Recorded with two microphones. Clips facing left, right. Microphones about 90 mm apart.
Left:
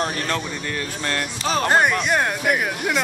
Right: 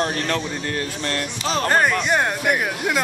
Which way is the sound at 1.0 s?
45° left (ahead or behind).